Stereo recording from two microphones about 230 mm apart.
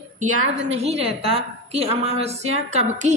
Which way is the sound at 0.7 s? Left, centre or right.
Right.